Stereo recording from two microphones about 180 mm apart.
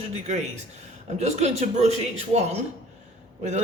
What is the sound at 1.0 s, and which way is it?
Speech, 40° right (ahead or behind).